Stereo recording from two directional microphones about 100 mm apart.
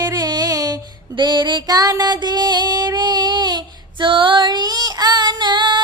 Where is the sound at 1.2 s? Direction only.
50° right (ahead or behind).